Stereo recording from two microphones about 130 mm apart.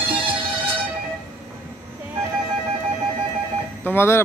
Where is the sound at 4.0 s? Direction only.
20° left (ahead or behind).